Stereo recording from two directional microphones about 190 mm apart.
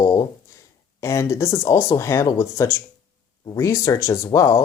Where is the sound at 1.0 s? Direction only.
15° left (ahead or behind).